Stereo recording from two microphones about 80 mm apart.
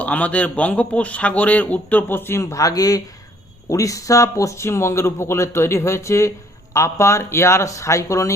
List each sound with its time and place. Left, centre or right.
0.0 s speech: centre; by 8.3 s left